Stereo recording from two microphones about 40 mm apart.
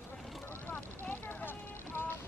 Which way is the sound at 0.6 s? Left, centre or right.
Left.